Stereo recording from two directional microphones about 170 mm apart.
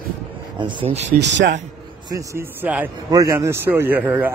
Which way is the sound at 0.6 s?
30° right (ahead or behind).